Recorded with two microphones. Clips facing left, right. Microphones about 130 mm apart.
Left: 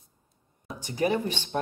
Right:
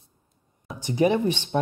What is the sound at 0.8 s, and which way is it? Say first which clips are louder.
Speech: right 5 dB; 20° right (ahead or behind).